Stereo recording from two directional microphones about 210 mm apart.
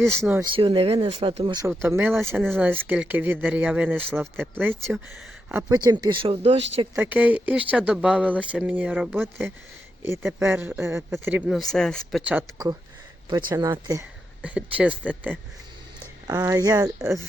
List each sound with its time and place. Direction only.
0.0 s speech: 5° left (ahead or behind)
0.5 s speech: 25° right (ahead or behind)
1.8 s speech: 10° right (ahead or behind); by 6.6 s 30° right (ahead or behind)
6.9 s speech: 10° right (ahead or behind)
13.5 s speech: 20° right (ahead or behind)
14.4 s speech: 5° right (ahead or behind)
16.0 s speech: 20° right (ahead or behind)